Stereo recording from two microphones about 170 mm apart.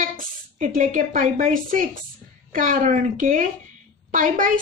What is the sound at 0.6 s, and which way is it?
A woman's voice, 50° right (ahead or behind).